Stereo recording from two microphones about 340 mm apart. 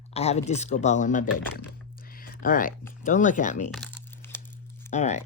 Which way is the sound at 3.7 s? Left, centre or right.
Centre.